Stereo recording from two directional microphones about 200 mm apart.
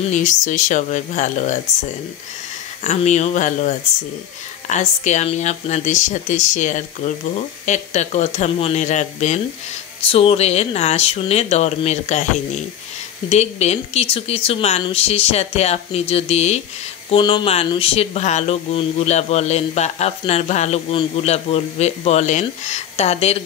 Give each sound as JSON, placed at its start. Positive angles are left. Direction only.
{"t": 0.0, "sound": "speech", "side_deg": 40}
{"t": 2.8, "sound": "speech", "side_deg": 35}